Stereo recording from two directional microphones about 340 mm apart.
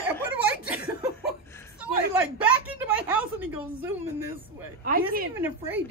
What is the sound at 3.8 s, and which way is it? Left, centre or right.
Speech, centre.